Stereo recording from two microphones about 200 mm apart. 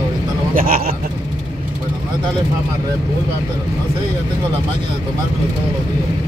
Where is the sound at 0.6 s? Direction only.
45° right (ahead or behind).